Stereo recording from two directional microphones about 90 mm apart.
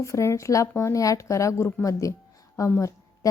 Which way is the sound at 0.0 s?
35° left (ahead or behind).